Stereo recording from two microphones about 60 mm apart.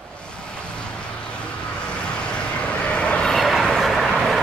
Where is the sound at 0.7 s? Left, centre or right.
Centre.